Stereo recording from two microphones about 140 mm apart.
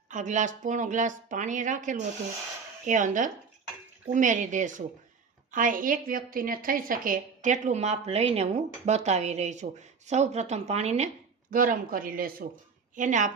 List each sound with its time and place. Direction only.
0.1 s a woman's voice: 60° right (ahead or behind)
11.5 s speech: 75° right (ahead or behind); by 12.5 s 90° right
13.0 s a woman's voice: 60° right (ahead or behind)